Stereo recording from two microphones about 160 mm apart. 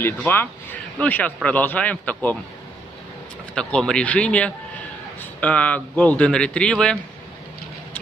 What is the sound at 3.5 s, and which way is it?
A man's voice, 5° left (ahead or behind).